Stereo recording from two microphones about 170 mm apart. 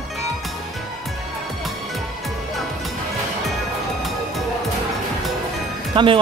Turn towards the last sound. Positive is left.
turn(degrees=-30)  # may be behind; listen again after turning